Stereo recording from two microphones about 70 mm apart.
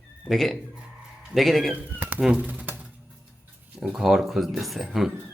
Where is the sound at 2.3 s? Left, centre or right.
Centre.